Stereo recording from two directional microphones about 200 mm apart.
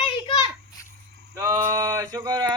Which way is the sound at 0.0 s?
25° left (ahead or behind).